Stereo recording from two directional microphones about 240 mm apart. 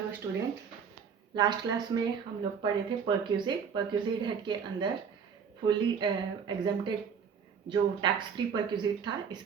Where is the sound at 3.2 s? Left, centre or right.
Centre.